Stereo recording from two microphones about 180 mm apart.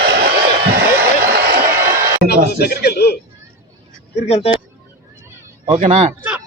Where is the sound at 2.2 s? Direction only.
60° left (ahead or behind).